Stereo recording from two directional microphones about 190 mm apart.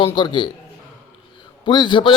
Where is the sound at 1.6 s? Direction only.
25° left (ahead or behind).